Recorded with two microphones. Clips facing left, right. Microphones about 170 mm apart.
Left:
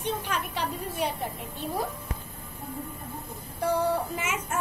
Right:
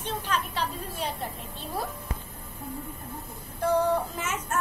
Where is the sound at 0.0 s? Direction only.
15° left (ahead or behind).